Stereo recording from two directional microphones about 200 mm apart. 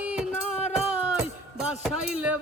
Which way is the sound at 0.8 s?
5° right (ahead or behind).